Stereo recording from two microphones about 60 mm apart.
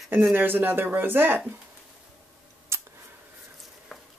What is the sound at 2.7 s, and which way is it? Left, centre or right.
Scissors, right.